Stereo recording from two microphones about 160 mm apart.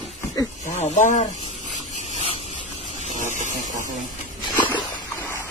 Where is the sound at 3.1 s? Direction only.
50° right (ahead or behind).